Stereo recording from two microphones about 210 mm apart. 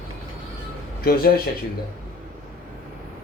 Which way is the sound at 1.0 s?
45° left (ahead or behind).